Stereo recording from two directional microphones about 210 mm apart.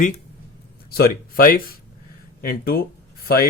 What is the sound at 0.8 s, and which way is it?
Speech, 45° left (ahead or behind).